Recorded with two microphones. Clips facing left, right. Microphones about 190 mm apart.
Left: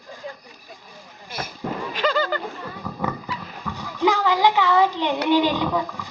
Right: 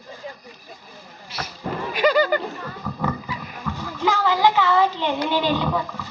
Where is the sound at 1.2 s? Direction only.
50° left (ahead or behind).